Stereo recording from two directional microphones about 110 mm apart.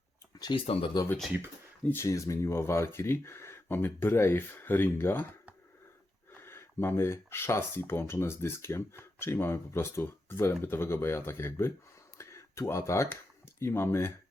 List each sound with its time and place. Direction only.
0.5 s speech: 55° left (ahead or behind)
1.9 s speech: 25° left (ahead or behind)
6.3 s speech: 20° left (ahead or behind)
12.1 s a sound: 25° left (ahead or behind)
13.6 s speech: 20° left (ahead or behind)